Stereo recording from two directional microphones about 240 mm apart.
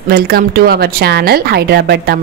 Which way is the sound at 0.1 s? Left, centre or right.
Right.